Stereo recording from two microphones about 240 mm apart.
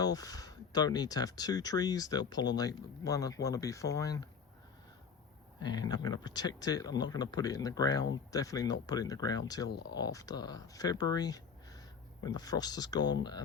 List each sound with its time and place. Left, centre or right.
0.0 s speech: centre
5.5 s speech: centre
9.6 s speech: left
10.0 s speech: centre